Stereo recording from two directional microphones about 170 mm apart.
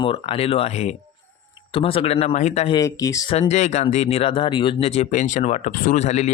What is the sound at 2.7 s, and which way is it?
Speech, 20° left (ahead or behind).